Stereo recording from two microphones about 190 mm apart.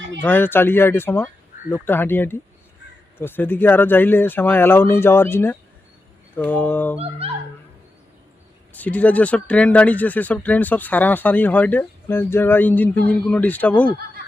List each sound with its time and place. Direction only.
0.2 s speech: 10° left (ahead or behind)
7.2 s a sound: 30° right (ahead or behind)
8.7 s speech: 10° left (ahead or behind)